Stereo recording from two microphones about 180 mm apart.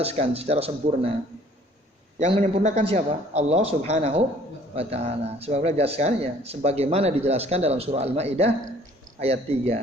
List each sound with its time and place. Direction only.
0.0 s speech: 35° right (ahead or behind)
2.1 s speech: 40° right (ahead or behind)